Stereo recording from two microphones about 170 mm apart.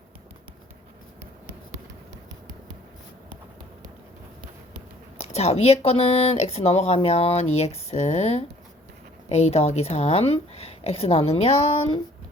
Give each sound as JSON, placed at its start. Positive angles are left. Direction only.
{"t": 5.1, "sound": "speech", "side_deg": 40}